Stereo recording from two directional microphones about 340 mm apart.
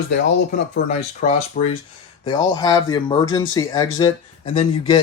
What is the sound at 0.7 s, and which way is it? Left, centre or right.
Speech, centre.